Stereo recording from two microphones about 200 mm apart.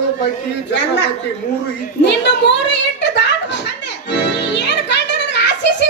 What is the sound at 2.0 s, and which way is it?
A woman's voice, 60° left (ahead or behind).